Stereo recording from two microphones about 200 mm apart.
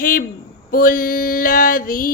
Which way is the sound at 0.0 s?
45° left (ahead or behind).